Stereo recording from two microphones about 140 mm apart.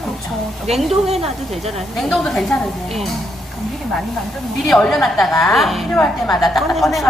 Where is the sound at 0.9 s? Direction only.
45° right (ahead or behind).